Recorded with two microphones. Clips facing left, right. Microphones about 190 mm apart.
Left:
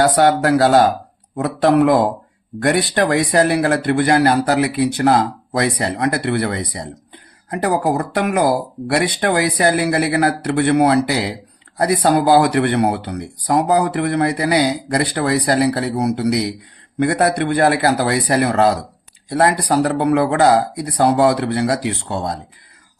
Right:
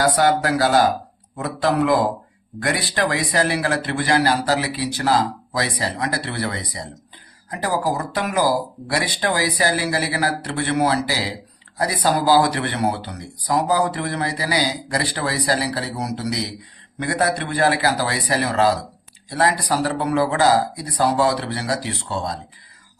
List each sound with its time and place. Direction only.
0.0 s speech: 60° left (ahead or behind)